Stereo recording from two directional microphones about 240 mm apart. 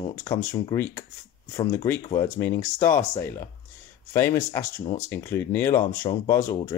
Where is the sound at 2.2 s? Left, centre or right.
Centre.